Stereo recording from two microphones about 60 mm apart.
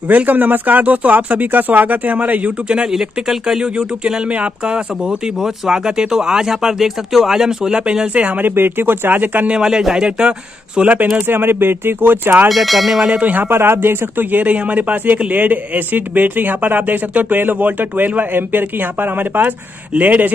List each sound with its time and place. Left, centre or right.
0.1 s speech: right
2.9 s speech: centre
3.7 s speech: right
8.5 s speech: right
9.5 s speech: centre
10.8 s speech: right
12.4 s speech: centre
13.2 s speech: right
13.5 s speech: right